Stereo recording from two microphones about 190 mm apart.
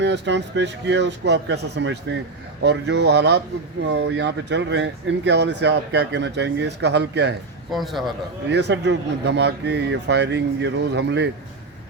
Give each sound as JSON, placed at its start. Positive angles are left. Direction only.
{"t": 0.0, "sound": "speech", "side_deg": -65}
{"t": 7.7, "sound": "a man's voice", "side_deg": 0}
{"t": 8.4, "sound": "speech", "side_deg": -65}